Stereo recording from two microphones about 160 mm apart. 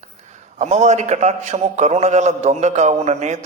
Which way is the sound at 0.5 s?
45° right (ahead or behind).